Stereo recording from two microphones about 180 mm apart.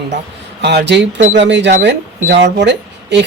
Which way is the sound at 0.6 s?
70° right (ahead or behind).